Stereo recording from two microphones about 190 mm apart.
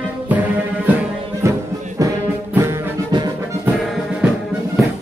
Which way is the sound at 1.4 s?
15° right (ahead or behind).